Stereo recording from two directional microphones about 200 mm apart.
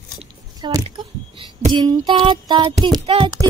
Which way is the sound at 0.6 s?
20° right (ahead or behind).